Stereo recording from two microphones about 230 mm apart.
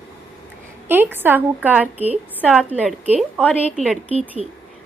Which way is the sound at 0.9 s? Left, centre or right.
Centre.